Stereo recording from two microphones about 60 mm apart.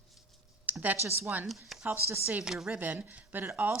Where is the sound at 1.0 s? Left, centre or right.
Right.